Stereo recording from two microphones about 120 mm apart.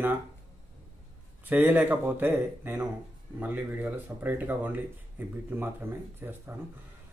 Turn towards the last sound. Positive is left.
turn(degrees=-15)  # may be behind; listen again after turning